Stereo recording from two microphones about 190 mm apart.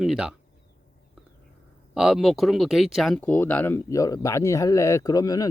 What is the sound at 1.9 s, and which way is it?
Speech, centre (ahead or behind).